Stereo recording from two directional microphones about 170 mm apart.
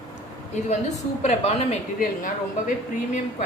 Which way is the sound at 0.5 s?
45° left (ahead or behind).